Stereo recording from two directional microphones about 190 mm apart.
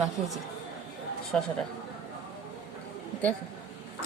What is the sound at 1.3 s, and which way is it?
Speech, 5° left (ahead or behind).